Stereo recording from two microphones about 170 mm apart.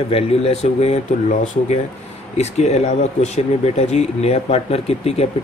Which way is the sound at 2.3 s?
40° left (ahead or behind).